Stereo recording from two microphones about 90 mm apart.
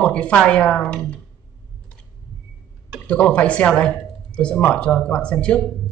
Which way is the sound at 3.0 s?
15° left (ahead or behind).